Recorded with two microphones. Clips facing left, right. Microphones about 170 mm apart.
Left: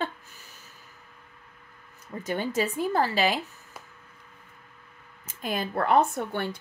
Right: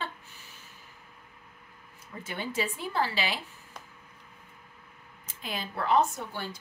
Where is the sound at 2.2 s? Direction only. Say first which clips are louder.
Left 6 dB; 40° left (ahead or behind).